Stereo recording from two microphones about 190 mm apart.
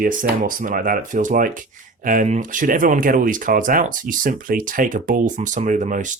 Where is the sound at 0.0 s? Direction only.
45° right (ahead or behind).